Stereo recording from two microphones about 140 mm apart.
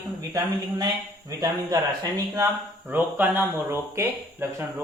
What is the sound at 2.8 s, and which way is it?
Speech, 15° right (ahead or behind).